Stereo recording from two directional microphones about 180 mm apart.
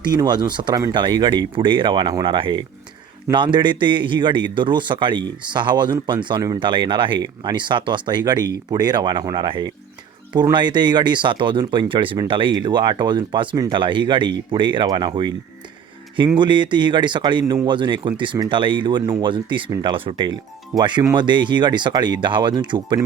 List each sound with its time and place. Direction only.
0.0 s speech: 25° right (ahead or behind)
16.4 s speech: 25° right (ahead or behind)